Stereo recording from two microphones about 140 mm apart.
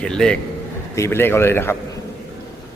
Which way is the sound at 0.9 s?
20° left (ahead or behind).